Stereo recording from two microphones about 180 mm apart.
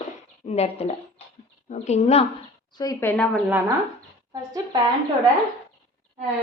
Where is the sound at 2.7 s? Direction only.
20° left (ahead or behind).